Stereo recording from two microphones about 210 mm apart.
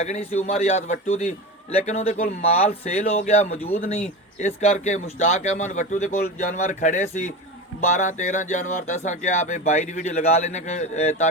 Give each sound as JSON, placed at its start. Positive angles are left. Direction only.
{"t": 0.0, "sound": "speech", "side_deg": 30}